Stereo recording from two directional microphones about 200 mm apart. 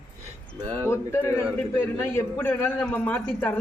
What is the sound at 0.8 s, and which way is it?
A man's voice, 10° left (ahead or behind).